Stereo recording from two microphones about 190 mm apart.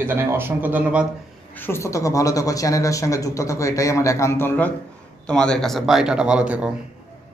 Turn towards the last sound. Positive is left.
turn(degrees=-5)  # may be behind; listen again after turning